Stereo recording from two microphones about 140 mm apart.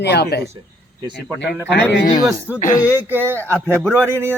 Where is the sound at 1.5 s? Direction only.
10° right (ahead or behind).